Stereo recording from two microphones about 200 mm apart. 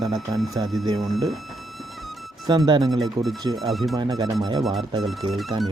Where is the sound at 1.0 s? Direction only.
Centre (ahead or behind).